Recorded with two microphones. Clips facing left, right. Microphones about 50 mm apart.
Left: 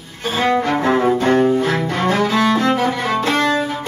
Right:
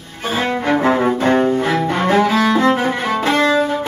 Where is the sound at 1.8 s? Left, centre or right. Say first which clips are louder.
Right 3 dB; right.